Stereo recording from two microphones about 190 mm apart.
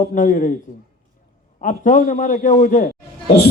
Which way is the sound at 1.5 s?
40° left (ahead or behind).